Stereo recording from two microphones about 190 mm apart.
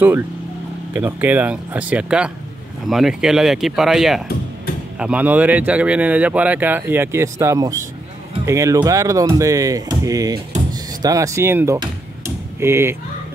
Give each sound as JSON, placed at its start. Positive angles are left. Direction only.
{"t": 0.9, "sound": "speech", "side_deg": -10}